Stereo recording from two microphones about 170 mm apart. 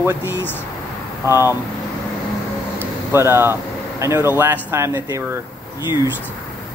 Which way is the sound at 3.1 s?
15° right (ahead or behind).